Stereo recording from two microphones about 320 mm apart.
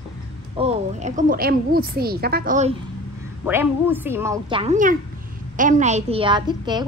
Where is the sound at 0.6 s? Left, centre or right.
Right.